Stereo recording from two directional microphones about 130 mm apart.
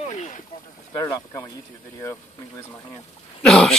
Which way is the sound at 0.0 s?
65° left (ahead or behind).